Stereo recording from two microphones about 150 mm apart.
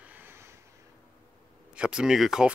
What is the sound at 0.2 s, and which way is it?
Vehicle, 15° right (ahead or behind).